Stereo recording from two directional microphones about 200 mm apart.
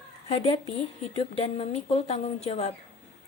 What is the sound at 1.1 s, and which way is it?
Speech, 30° left (ahead or behind).